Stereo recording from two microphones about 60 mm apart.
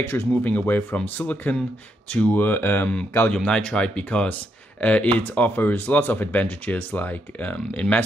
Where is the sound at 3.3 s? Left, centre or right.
Centre.